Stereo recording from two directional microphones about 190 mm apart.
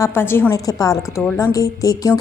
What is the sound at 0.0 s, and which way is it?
Speech, 10° left (ahead or behind).